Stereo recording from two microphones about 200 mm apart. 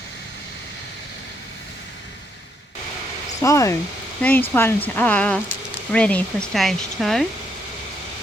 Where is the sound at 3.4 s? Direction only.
15° left (ahead or behind).